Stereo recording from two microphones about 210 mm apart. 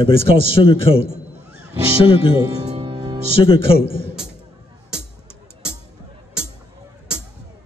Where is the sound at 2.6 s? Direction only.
30° right (ahead or behind).